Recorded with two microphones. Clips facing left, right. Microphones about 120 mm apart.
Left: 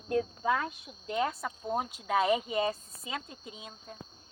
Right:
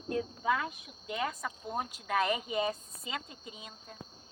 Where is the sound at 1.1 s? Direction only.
5° left (ahead or behind).